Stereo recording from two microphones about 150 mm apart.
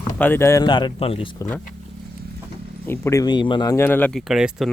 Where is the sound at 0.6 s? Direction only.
30° left (ahead or behind).